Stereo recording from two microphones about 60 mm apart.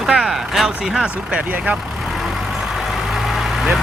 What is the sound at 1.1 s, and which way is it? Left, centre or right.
Speech, right.